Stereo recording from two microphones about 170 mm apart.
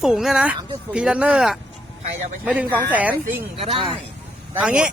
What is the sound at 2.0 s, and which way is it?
Speech, 45° right (ahead or behind).